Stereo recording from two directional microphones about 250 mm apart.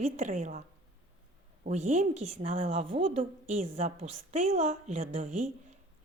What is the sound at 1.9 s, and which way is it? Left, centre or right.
A woman's voice, right.